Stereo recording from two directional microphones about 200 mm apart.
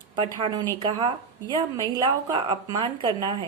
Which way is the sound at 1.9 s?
20° right (ahead or behind).